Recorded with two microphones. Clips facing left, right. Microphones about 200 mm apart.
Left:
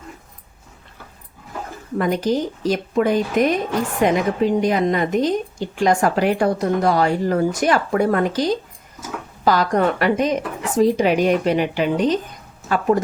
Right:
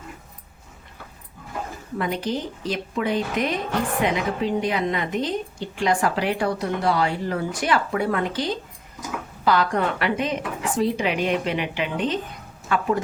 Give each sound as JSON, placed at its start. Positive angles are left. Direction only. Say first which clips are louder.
{"t": 2.0, "sound": "a woman's voice", "louder": "left 7 dB", "side_deg": 45}